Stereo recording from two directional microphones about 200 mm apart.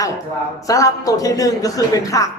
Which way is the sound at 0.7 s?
15° left (ahead or behind).